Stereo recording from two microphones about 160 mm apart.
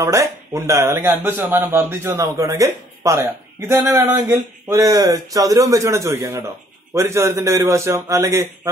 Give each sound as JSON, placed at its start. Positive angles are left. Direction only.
{"t": 0.0, "sound": "speech", "side_deg": -20}